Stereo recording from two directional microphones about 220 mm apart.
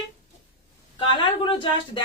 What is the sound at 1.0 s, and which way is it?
A woman's voice, 20° left (ahead or behind).